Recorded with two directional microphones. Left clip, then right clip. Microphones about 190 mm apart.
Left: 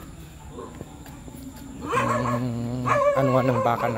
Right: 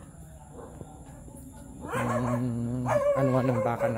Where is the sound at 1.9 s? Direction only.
25° right (ahead or behind).